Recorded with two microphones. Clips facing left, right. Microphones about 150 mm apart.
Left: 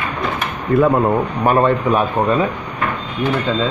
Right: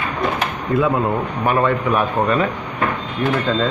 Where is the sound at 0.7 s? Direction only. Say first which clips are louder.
Left 4 dB; 55° left (ahead or behind).